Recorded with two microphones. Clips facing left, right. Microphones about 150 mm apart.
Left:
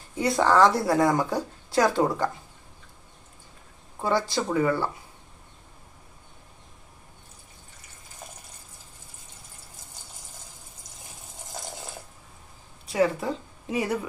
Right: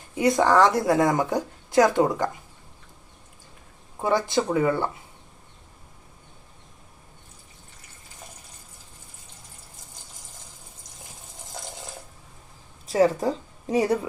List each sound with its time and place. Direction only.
0.2 s speech: 15° right (ahead or behind)
4.0 s speech: 20° right (ahead or behind)
12.9 s speech: 40° right (ahead or behind)